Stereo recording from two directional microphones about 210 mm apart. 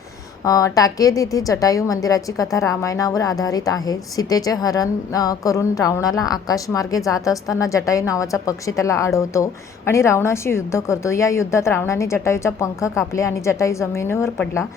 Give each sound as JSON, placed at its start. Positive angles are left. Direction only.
{"t": 0.4, "sound": "a woman's voice", "side_deg": 15}